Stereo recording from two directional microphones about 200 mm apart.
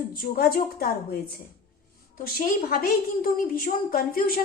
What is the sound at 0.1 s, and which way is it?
A woman's voice, 50° left (ahead or behind).